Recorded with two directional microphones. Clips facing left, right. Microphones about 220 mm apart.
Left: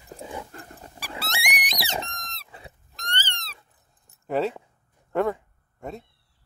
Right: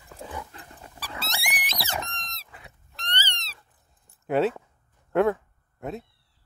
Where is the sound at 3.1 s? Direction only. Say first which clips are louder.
Left 1 dB; 50° left (ahead or behind).